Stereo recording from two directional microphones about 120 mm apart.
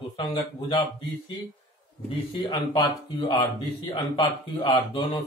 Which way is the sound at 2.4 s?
35° left (ahead or behind).